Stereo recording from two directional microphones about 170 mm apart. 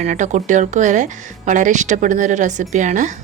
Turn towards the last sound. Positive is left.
turn(degrees=-45)  # may be behind; listen again after turning